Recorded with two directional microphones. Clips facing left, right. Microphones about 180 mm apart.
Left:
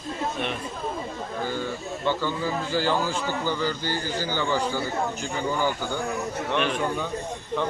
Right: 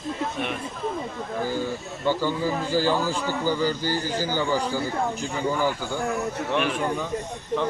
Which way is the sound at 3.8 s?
40° right (ahead or behind).